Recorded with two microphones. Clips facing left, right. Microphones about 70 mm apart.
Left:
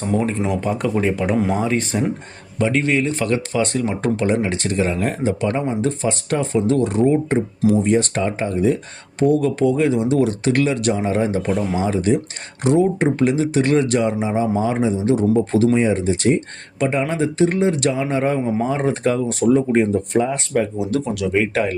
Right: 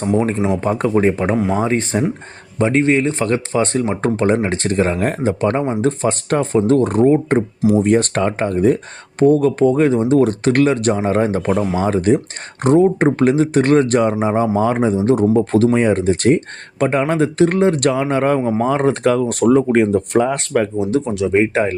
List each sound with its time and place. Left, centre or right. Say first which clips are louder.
0.5 s speech: right 4 dB; right
18.6 s speech: right 4 dB; right
20.7 s speech: right 4 dB; right